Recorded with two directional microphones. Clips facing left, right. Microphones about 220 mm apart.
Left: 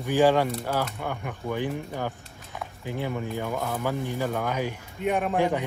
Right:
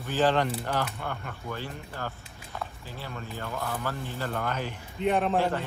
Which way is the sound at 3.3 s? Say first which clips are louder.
Left 5 dB; 15° left (ahead or behind).